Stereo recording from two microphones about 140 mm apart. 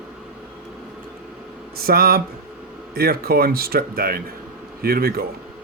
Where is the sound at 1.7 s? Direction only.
90° right.